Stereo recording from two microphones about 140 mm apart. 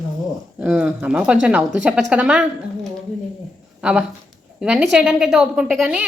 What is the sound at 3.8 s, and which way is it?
A woman's voice, 5° right (ahead or behind).